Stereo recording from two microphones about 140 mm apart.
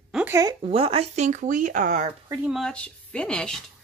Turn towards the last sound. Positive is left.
turn(degrees=5)  # may be behind; listen again after turning